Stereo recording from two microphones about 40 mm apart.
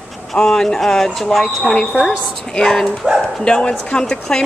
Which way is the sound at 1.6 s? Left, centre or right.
Left.